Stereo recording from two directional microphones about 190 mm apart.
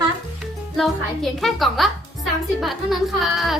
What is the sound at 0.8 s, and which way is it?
Speech, centre (ahead or behind).